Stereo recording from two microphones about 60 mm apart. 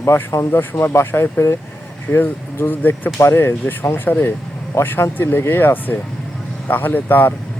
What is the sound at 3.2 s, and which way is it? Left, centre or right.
Speech, left.